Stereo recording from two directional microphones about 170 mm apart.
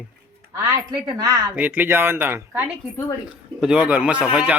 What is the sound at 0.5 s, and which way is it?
A woman's voice, 20° right (ahead or behind).